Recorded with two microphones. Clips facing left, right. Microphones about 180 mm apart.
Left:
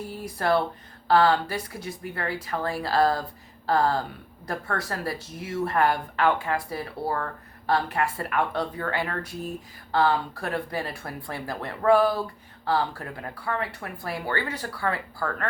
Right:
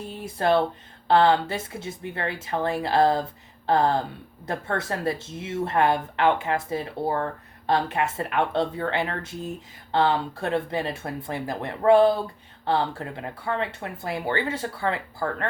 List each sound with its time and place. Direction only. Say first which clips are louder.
0.0 s speech: right 3 dB; 25° right (ahead or behind)